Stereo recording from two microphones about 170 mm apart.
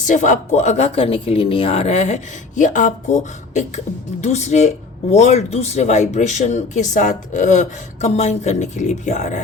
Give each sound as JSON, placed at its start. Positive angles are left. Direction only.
{"t": 0.0, "sound": "speech", "side_deg": 50}
{"t": 4.2, "sound": "speech", "side_deg": 40}